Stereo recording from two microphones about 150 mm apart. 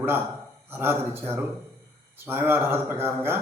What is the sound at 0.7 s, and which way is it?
A man's voice, 15° right (ahead or behind).